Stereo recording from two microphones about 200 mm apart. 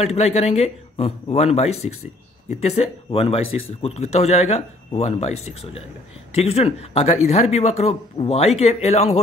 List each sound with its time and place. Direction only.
0.0 s a man's voice: 30° left (ahead or behind)